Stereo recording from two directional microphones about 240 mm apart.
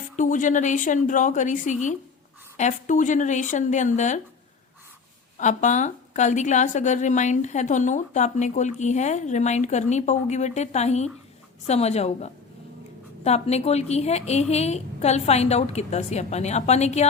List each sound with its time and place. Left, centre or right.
0.2 s a woman's voice: left
5.4 s a woman's voice: left